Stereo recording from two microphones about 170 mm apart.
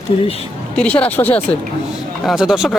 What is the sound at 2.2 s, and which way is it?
Speech, 5° right (ahead or behind).